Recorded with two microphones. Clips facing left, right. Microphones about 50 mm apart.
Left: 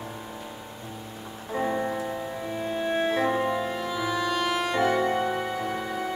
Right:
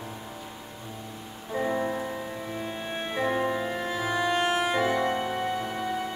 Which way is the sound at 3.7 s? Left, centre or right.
Right.